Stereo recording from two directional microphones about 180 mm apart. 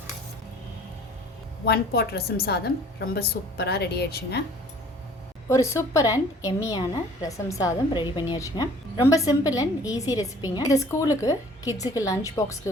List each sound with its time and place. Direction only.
1.6 s a woman's voice: 60° left (ahead or behind)
5.5 s a woman's voice: 15° left (ahead or behind)